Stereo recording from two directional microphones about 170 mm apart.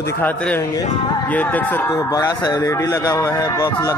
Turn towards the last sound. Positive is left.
turn(degrees=20)  # may be behind; listen again after turning